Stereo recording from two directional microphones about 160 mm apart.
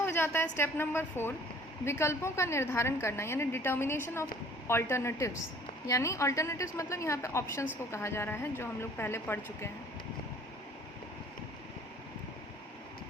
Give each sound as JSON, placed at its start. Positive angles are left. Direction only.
{"t": 0.0, "sound": "a woman's voice", "side_deg": 15}